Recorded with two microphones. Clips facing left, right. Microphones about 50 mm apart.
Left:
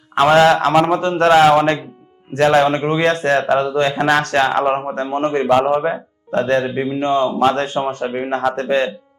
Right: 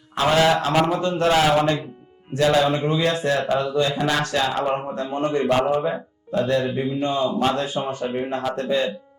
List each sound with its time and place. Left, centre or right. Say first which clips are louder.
0.1 s speech: left 7 dB; left